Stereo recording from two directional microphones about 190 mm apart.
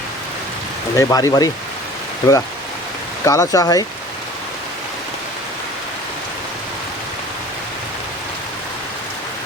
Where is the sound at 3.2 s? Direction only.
15° left (ahead or behind).